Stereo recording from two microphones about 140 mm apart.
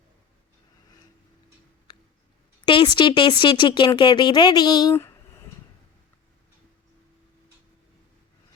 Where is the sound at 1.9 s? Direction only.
30° left (ahead or behind).